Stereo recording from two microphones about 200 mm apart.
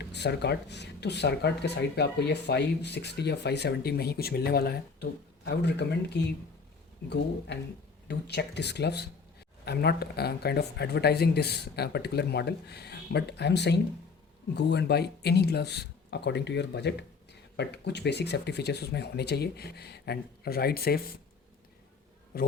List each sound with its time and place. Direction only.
0.0 s speech: 55° left (ahead or behind)